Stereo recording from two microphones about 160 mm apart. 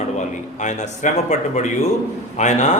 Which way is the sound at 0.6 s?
50° left (ahead or behind).